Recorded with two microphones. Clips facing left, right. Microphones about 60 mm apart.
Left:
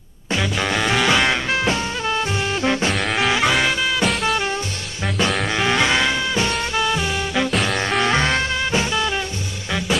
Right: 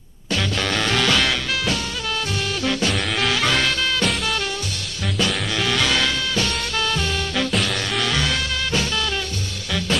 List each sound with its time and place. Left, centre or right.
0.3 s music: centre
3.2 s swing music: centre
5.6 s music: left